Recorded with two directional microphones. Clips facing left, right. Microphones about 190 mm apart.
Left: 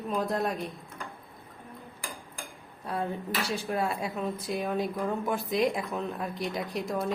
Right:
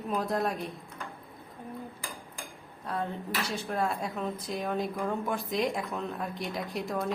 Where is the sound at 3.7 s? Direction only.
5° left (ahead or behind).